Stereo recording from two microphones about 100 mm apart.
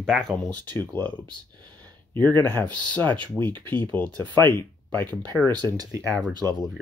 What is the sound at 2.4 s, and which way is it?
Speech, 20° left (ahead or behind).